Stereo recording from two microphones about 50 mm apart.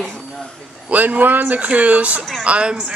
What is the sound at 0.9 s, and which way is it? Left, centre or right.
Speech, right.